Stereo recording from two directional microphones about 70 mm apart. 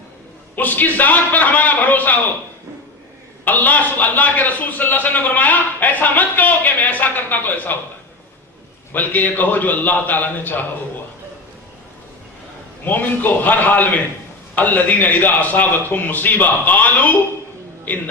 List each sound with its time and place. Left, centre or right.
0.5 s a man's voice: left
3.4 s a man's voice: left
8.9 s a man's voice: left
12.8 s a man's voice: left